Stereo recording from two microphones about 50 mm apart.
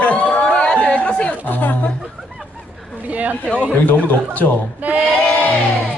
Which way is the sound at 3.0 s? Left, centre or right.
Right.